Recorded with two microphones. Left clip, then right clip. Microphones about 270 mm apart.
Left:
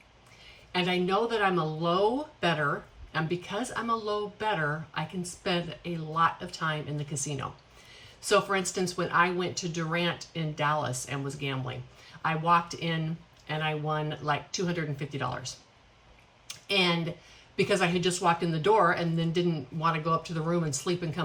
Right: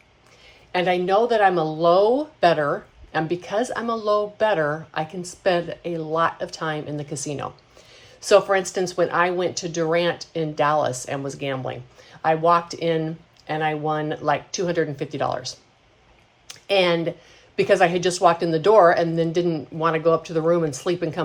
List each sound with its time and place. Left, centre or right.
0.7 s a woman's voice: centre
3.1 s a woman's voice: centre
16.5 s a woman's voice: centre